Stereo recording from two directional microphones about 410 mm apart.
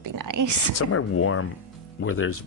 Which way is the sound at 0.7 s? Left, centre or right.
Left.